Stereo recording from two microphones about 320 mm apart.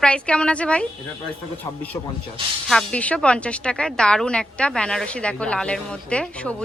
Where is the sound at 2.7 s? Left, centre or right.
Centre.